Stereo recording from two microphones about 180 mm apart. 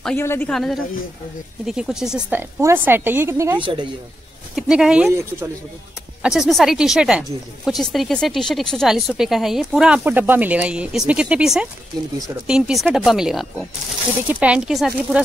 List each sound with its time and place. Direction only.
0.0 s a woman's voice: 10° left (ahead or behind); by 3.6 s 15° right (ahead or behind)
3.6 s speech: 25° right (ahead or behind)
4.6 s speech: 5° right (ahead or behind)
6.2 s a woman's voice: 5° right (ahead or behind)